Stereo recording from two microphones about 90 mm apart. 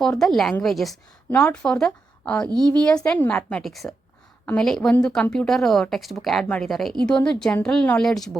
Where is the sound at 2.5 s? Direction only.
50° right (ahead or behind).